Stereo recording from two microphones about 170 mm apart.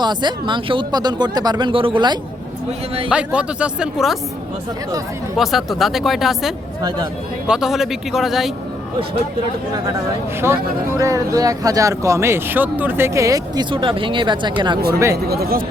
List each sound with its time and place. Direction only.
0.0 s speech: 25° right (ahead or behind)
3.1 s speech: 5° right (ahead or behind)
5.4 s speech: centre (ahead or behind)
10.4 s speech: 15° right (ahead or behind)
15.1 s speech: 65° right (ahead or behind)